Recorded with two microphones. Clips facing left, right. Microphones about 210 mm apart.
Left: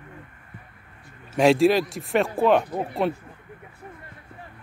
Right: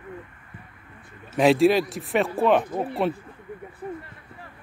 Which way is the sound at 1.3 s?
Centre (ahead or behind).